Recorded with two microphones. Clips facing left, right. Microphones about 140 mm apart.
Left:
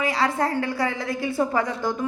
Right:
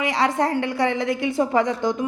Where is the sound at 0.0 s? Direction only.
20° right (ahead or behind).